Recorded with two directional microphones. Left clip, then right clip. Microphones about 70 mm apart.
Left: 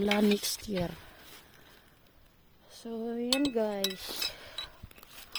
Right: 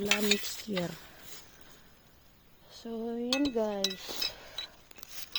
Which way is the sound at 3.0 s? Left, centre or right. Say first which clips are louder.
Left 1 dB; left.